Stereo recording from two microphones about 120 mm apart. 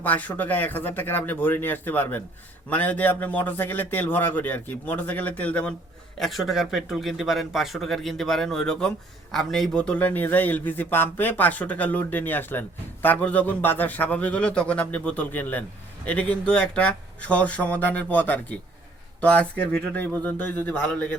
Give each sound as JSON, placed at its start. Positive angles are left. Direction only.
{"t": 0.0, "sound": "a man's voice", "side_deg": 15}
{"t": 6.1, "sound": "a man's voice", "side_deg": 0}